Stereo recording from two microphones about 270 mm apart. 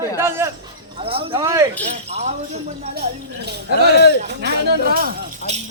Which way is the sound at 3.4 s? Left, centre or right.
Right.